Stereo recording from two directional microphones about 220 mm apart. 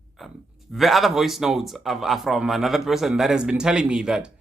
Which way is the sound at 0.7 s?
Centre (ahead or behind).